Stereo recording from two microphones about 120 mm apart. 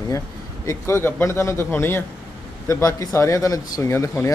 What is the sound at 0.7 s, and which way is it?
Speech, 20° left (ahead or behind).